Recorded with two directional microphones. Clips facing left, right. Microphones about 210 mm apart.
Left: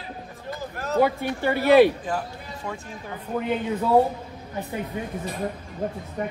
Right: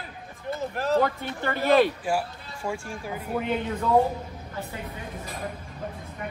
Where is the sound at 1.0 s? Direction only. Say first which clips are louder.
Left 5 dB; 10° left (ahead or behind).